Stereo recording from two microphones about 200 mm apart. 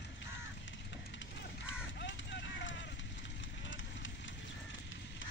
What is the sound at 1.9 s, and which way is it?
Vehicle, 65° left (ahead or behind).